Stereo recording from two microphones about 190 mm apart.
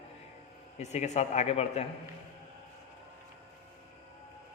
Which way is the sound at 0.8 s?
35° left (ahead or behind).